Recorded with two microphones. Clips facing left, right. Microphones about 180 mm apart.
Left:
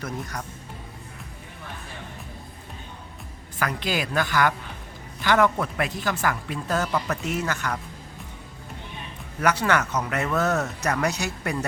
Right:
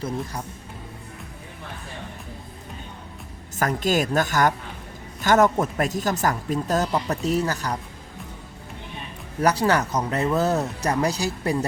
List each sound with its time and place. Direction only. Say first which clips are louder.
0.0 s speech: right 3 dB; 30° right (ahead or behind)
3.6 s speech: right 5 dB; 45° right (ahead or behind)
9.4 s speech: right 2 dB; 35° right (ahead or behind)